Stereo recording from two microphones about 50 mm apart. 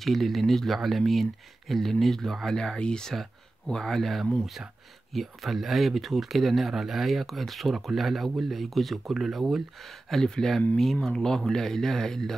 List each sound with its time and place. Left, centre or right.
0.0 s speech: centre
9.5 s speech: centre